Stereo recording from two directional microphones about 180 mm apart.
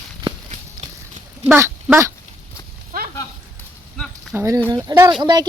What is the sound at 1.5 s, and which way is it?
Speech, 15° right (ahead or behind).